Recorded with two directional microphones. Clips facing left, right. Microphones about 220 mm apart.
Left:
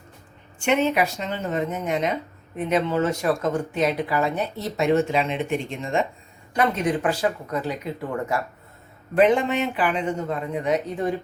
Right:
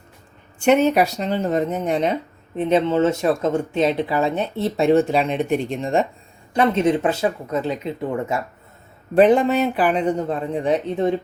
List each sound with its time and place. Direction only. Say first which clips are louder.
0.6 s speech: right 5 dB; 40° right (ahead or behind)
6.5 s speech: right 5 dB; 25° right (ahead or behind)
9.1 s speech: right 4 dB; 35° right (ahead or behind)